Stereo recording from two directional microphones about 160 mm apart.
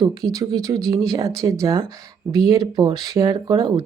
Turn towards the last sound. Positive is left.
turn(degrees=-25)  # may be behind; listen again after turning